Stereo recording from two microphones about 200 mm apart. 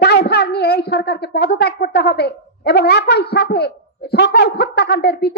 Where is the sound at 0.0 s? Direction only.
50° left (ahead or behind).